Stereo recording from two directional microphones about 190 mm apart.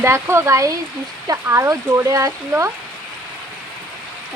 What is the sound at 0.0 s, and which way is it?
Speech, 15° right (ahead or behind).